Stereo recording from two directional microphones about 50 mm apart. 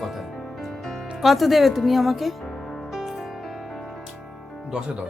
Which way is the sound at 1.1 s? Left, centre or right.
Centre.